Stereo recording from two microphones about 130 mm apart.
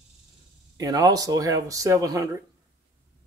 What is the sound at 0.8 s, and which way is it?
Speech, 30° right (ahead or behind).